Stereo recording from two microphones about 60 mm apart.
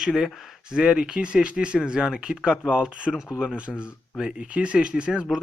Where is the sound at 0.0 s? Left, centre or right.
Centre.